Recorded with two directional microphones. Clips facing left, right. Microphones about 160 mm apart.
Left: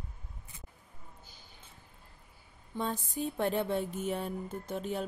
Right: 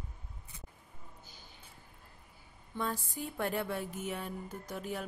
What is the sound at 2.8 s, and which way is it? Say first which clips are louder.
A woman's voice: left 3 dB; 20° left (ahead or behind).